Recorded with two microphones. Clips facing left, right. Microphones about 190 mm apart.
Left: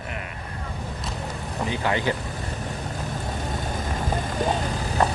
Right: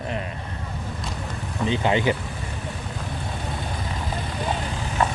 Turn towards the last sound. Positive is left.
turn(degrees=40)  # may be behind; listen again after turning